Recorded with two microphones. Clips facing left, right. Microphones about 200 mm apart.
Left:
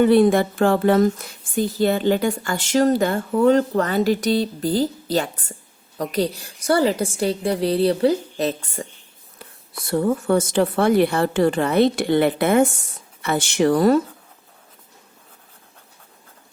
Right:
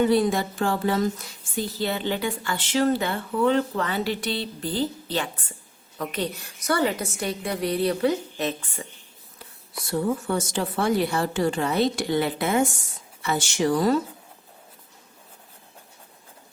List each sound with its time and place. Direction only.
0.0 s a woman's voice: 60° left (ahead or behind); by 8.9 s 40° left (ahead or behind)
9.8 s speech: 55° left (ahead or behind)